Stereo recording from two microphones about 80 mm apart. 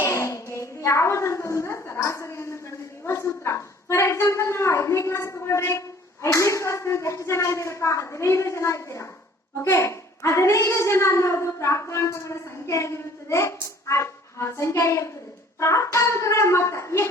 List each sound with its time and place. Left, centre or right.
0.0 s a child's voice: left